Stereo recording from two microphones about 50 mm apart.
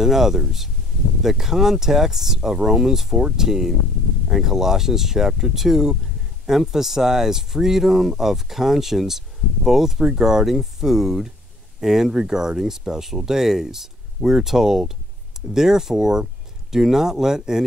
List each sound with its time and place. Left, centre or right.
0.0 s speech: centre